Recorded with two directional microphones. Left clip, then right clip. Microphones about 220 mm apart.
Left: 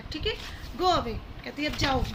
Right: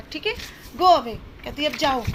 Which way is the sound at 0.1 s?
25° right (ahead or behind).